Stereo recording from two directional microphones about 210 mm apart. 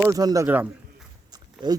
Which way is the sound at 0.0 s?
15° right (ahead or behind).